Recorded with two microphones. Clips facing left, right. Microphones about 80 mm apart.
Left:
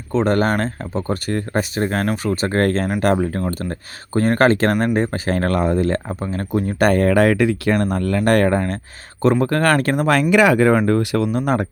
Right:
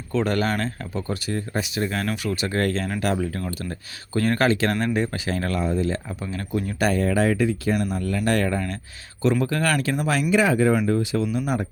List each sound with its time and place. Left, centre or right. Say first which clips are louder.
0.1 s speech: left 6 dB; left
1.3 s speech: left 6 dB; left
10.1 s speech: left 6 dB; left